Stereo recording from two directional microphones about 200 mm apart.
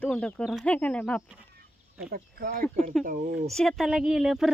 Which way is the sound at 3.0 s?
40° right (ahead or behind).